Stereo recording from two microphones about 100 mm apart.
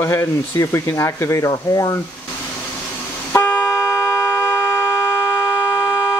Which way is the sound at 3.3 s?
15° left (ahead or behind).